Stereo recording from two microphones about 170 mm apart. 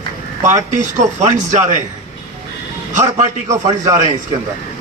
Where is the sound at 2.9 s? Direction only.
45° right (ahead or behind).